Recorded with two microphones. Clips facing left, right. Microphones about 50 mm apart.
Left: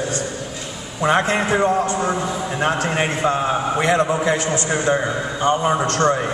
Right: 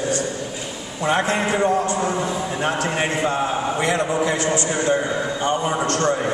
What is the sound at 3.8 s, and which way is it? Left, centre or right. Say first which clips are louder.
Speech: left 3 dB; left.